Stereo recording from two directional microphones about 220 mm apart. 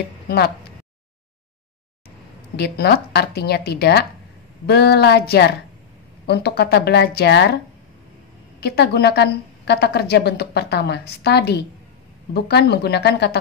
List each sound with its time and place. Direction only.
2.5 s a woman's voice: 45° left (ahead or behind)